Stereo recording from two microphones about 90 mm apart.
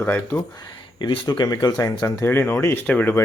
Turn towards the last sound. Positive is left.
turn(degrees=20)  # may be behind; listen again after turning